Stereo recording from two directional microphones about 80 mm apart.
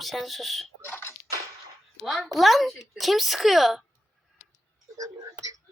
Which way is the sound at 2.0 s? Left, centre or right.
Centre.